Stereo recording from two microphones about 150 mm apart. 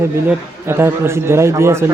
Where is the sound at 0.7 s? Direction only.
15° right (ahead or behind).